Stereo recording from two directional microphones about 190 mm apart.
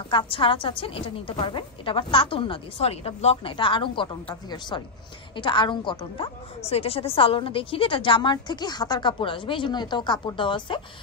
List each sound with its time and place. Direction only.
0.1 s a woman's voice: 25° left (ahead or behind)